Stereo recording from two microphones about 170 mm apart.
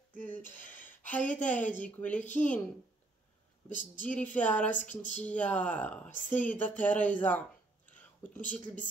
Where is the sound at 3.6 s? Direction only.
50° left (ahead or behind).